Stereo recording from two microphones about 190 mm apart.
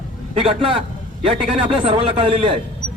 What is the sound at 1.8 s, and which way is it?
Speech, 30° right (ahead or behind).